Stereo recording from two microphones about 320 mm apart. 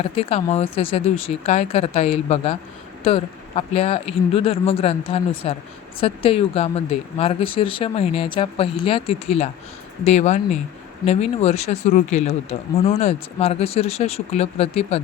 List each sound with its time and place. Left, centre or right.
0.0 s speech: centre